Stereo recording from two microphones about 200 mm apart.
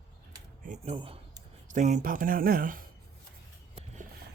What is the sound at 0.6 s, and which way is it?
Speech, 40° right (ahead or behind).